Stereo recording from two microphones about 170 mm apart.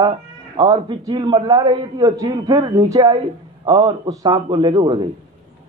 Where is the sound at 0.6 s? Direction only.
25° right (ahead or behind).